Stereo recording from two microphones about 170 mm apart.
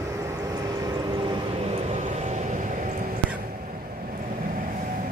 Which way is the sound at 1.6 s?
40° right (ahead or behind).